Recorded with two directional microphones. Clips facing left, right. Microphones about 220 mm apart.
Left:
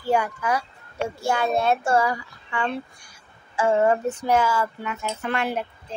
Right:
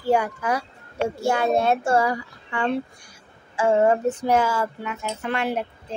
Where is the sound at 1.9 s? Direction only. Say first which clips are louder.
Right 1 dB; 35° right (ahead or behind).